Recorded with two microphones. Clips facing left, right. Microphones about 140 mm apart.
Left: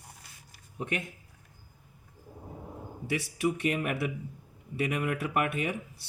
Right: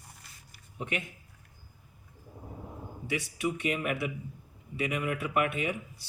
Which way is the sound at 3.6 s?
40° left (ahead or behind).